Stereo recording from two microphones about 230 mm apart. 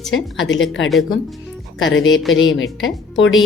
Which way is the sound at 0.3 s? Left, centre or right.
Left.